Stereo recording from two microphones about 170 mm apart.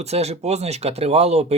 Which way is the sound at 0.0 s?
40° right (ahead or behind).